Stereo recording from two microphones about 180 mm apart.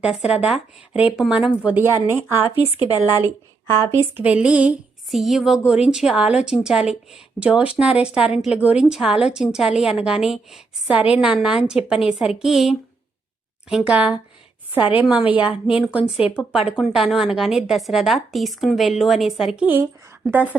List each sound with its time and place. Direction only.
0.0 s speech: 5° right (ahead or behind)
2.9 s a woman's voice: 20° left (ahead or behind)
3.9 s a woman's voice: 10° right (ahead or behind)